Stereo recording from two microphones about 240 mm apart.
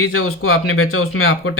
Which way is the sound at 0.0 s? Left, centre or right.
Left.